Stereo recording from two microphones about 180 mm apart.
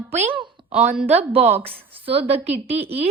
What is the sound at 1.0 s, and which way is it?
A woman's voice, 35° right (ahead or behind).